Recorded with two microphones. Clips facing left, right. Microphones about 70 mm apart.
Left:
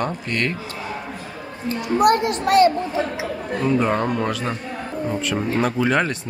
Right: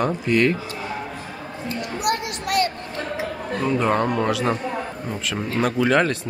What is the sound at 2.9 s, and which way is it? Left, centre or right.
Chatter, centre.